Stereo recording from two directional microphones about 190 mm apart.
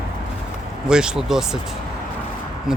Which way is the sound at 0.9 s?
5° right (ahead or behind).